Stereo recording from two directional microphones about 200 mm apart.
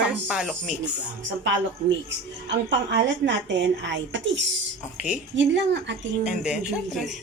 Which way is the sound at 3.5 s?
65° right (ahead or behind).